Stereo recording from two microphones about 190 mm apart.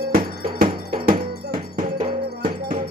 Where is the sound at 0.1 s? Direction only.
50° right (ahead or behind).